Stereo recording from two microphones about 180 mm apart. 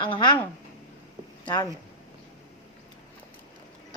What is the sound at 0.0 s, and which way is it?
Speech, 30° left (ahead or behind).